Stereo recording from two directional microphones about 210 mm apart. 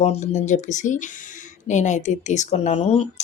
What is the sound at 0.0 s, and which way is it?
Speech, 30° left (ahead or behind).